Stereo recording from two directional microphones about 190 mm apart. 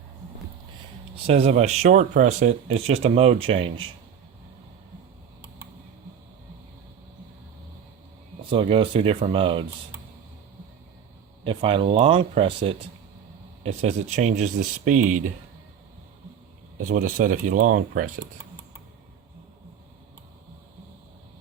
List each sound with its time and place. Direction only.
1.1 s speech: 35° right (ahead or behind)
8.4 s speech: 30° right (ahead or behind)
11.4 s speech: 30° right (ahead or behind)
16.8 s speech: 45° right (ahead or behind)